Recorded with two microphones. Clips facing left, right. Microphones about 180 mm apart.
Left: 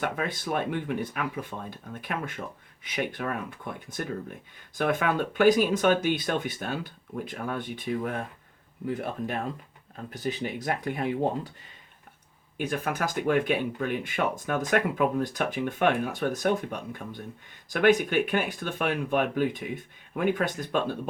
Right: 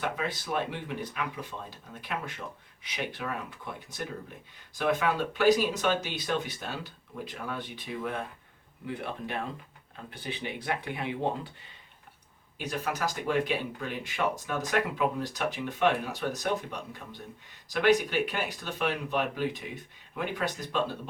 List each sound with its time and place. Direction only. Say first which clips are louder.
0.0 s speech: left 3 dB; 50° left (ahead or behind)
12.5 s speech: left 3 dB; 55° left (ahead or behind)